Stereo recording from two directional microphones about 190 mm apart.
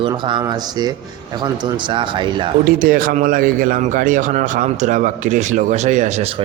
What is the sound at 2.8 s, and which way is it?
Speech, 45° right (ahead or behind).